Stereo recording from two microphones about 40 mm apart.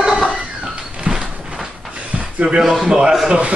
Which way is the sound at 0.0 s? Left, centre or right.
Centre.